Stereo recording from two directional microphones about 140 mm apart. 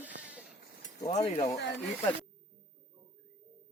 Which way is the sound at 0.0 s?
10° right (ahead or behind).